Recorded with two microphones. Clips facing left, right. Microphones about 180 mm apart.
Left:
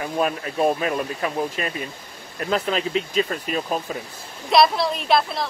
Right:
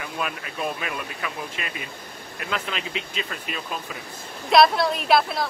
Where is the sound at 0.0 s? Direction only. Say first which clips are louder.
Left 7 dB; 35° left (ahead or behind).